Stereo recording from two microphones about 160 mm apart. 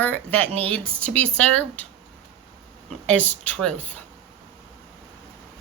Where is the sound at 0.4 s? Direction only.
40° right (ahead or behind).